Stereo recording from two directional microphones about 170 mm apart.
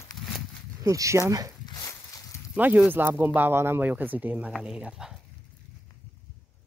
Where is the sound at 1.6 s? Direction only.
20° left (ahead or behind).